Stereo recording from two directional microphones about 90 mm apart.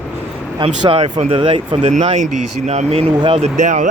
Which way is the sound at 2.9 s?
80° right.